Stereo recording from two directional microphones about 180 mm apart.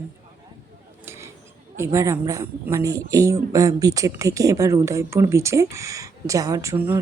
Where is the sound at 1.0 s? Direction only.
15° right (ahead or behind).